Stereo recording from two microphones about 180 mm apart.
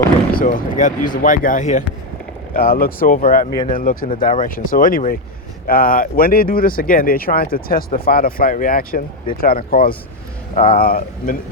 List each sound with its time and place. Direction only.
0.3 s speech: 45° left (ahead or behind)
2.5 s speech: 55° left (ahead or behind)